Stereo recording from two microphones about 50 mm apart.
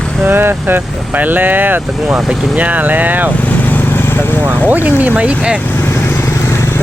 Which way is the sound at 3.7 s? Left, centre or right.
Left.